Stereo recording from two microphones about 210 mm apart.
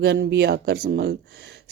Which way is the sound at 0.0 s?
55° right (ahead or behind).